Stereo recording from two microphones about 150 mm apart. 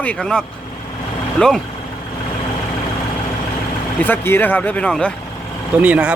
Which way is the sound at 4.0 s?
15° left (ahead or behind).